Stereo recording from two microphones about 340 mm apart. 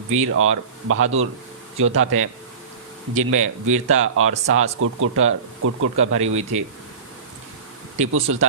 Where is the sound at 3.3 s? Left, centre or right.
Right.